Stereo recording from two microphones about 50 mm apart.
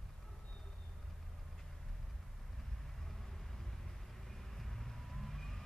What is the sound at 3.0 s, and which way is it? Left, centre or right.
Vehicle, centre.